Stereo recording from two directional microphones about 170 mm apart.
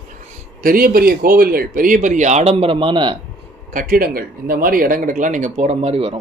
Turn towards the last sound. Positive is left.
turn(degrees=-35)  # may be behind; listen again after turning